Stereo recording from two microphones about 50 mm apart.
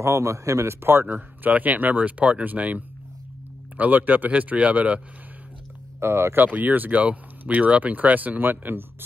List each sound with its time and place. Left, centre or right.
0.0 s a man's voice: right
0.8 s speech: right
5.9 s speech: right
6.4 s speech: right